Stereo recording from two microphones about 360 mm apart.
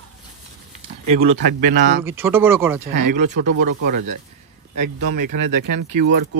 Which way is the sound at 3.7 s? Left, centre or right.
Right.